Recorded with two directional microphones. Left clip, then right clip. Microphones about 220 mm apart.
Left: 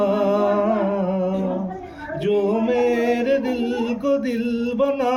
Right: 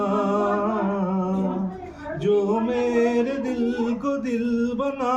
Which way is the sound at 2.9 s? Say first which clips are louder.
Left 2 dB; 10° right (ahead or behind).